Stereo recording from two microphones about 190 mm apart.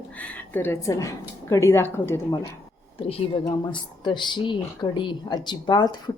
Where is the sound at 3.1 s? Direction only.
25° left (ahead or behind).